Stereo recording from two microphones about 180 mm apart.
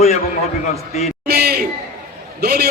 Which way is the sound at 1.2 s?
60° right (ahead or behind).